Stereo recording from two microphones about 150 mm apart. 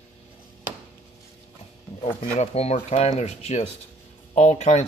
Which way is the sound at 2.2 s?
50° left (ahead or behind).